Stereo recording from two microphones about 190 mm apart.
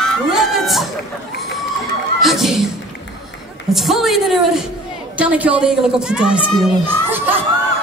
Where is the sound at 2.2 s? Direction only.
Centre (ahead or behind).